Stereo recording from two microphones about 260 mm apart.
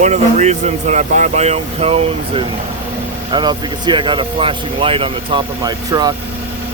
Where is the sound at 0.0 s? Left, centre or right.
Right.